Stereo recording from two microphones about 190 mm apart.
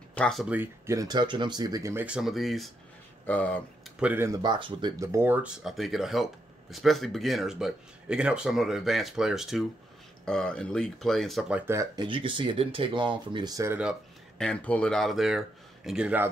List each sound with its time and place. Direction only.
0.1 s speech: 5° left (ahead or behind)
4.0 s speech: 10° right (ahead or behind)
14.4 s speech: 5° left (ahead or behind)